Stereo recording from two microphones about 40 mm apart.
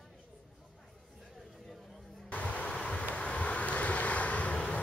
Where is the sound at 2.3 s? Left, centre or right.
Left.